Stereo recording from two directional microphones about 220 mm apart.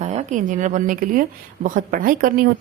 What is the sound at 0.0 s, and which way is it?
A woman's voice, 30° right (ahead or behind).